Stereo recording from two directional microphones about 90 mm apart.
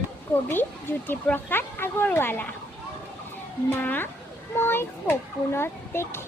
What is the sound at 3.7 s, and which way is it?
Speech, 20° left (ahead or behind).